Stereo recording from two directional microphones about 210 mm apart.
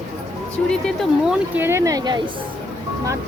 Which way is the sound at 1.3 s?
10° right (ahead or behind).